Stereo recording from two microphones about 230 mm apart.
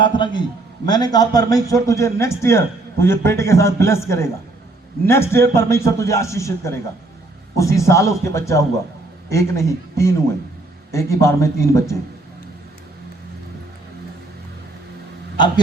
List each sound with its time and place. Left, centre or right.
0.0 s a man's voice: centre